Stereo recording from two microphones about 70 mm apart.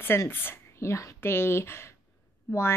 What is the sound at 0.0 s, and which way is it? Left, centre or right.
A woman's voice, left.